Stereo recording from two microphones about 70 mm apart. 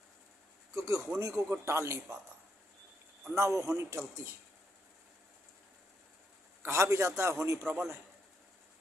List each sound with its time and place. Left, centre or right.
0.7 s a man's voice: right
3.3 s a man's voice: right
6.6 s a man's voice: right